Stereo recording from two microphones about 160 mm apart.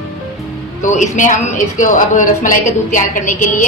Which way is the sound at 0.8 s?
50° left (ahead or behind).